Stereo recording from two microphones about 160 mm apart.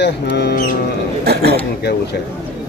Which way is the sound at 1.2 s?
80° right.